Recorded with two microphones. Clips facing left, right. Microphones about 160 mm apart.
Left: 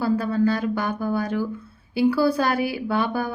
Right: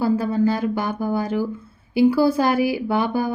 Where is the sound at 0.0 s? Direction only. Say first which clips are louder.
Right 2 dB; 20° right (ahead or behind).